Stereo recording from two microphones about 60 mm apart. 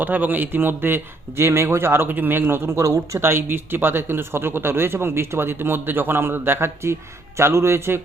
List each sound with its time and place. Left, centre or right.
0.0 s speech: right
2.6 s a man's voice: right